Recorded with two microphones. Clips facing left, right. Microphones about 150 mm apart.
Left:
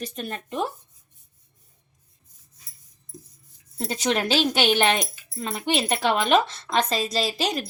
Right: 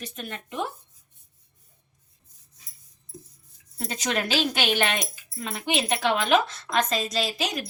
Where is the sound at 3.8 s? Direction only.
30° left (ahead or behind).